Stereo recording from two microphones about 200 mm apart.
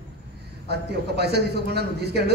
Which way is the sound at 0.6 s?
55° right (ahead or behind).